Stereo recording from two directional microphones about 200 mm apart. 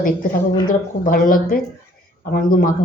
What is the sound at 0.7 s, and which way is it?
Speech, 45° left (ahead or behind).